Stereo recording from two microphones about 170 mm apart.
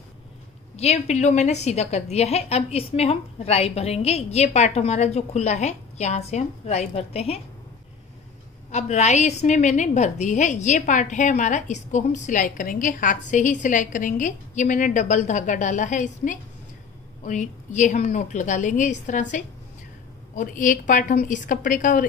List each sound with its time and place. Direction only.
0.7 s a woman's voice: 40° left (ahead or behind)
8.7 s a woman's voice: 40° left (ahead or behind)